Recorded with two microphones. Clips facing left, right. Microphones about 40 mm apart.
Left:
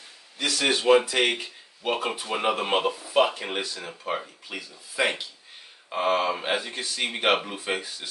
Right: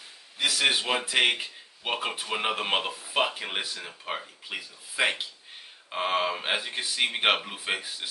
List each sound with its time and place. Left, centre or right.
0.4 s speech: centre